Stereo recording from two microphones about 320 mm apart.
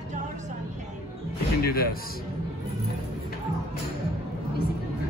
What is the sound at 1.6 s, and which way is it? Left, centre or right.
Speech, left.